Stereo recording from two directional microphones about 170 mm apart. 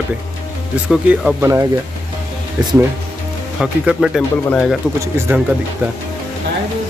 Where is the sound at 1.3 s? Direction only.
15° right (ahead or behind).